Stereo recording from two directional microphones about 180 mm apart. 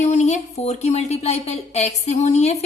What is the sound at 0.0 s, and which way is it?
A woman's voice, 40° left (ahead or behind).